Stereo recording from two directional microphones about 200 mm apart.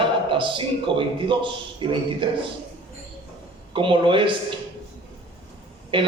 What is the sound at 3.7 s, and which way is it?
Speech, 25° right (ahead or behind).